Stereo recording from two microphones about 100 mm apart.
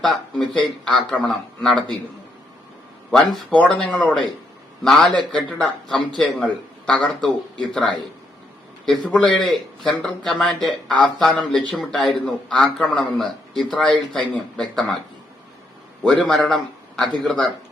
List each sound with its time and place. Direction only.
0.0 s speech: 5° left (ahead or behind)
3.1 s a man's voice: 10° left (ahead or behind)
8.9 s speech: 5° left (ahead or behind)
16.2 s speech: centre (ahead or behind)